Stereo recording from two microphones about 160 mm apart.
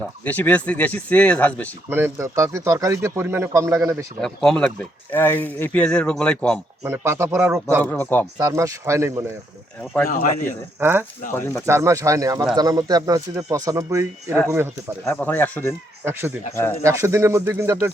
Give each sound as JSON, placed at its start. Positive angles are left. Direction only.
{"t": 0.3, "sound": "speech", "side_deg": 10}
{"t": 1.9, "sound": "speech", "side_deg": -15}
{"t": 4.2, "sound": "speech", "side_deg": 5}
{"t": 6.8, "sound": "speech", "side_deg": -15}
{"t": 7.8, "sound": "speech", "side_deg": 10}
{"t": 8.4, "sound": "speech", "side_deg": -20}
{"t": 10.1, "sound": "speech", "side_deg": 55}
{"t": 10.8, "sound": "speech", "side_deg": -15}
{"t": 11.3, "sound": "speech", "side_deg": 15}
{"t": 11.6, "sound": "speech", "side_deg": -20}
{"t": 15.0, "sound": "speech", "side_deg": 10}
{"t": 16.0, "sound": "speech", "side_deg": -15}